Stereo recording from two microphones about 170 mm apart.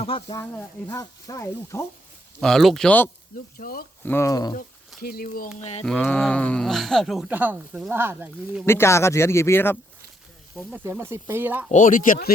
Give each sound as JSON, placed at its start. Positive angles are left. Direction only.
{"t": 0.0, "sound": "speech", "side_deg": 35}
{"t": 0.3, "sound": "speech", "side_deg": 15}
{"t": 2.4, "sound": "speech", "side_deg": 0}
{"t": 3.6, "sound": "speech", "side_deg": 60}
{"t": 4.0, "sound": "speech", "side_deg": 15}
{"t": 4.9, "sound": "speech", "side_deg": 60}
{"t": 5.5, "sound": "speech", "side_deg": 45}
{"t": 5.8, "sound": "speech", "side_deg": 5}
{"t": 8.6, "sound": "speech", "side_deg": 15}
{"t": 10.8, "sound": "speech", "side_deg": -15}
{"t": 11.7, "sound": "speech", "side_deg": 50}